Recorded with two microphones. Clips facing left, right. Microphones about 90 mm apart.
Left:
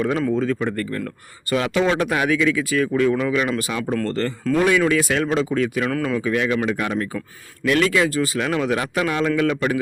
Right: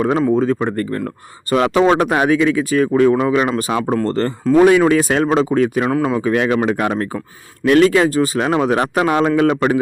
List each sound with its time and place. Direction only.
0.2 s speech: 30° right (ahead or behind)
5.9 s speech: 25° right (ahead or behind)
6.1 s speech: 45° right (ahead or behind)